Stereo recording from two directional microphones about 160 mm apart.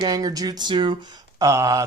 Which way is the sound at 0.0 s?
25° right (ahead or behind).